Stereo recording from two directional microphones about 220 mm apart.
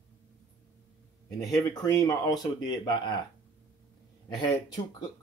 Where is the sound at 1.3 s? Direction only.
15° left (ahead or behind).